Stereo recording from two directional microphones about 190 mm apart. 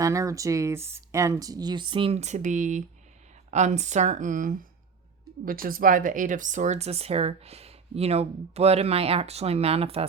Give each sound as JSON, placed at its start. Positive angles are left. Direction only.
{"t": 0.0, "sound": "speech", "side_deg": -15}